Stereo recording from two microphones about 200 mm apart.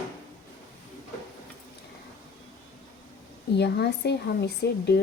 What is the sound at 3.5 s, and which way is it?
Speech, 55° left (ahead or behind).